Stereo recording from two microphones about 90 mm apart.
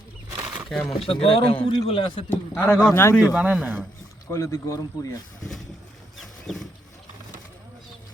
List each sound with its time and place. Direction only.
0.7 s speech: centre (ahead or behind)
0.9 s speech: 85° left
1.9 s a man's voice: 70° left (ahead or behind)
2.3 s a man's voice: 25° left (ahead or behind)
3.3 s a man's voice: 10° right (ahead or behind)
4.3 s speech: 35° left (ahead or behind)
6.1 s wild animals: centre (ahead or behind)